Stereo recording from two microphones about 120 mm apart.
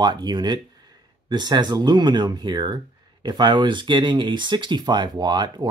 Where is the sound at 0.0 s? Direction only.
35° right (ahead or behind).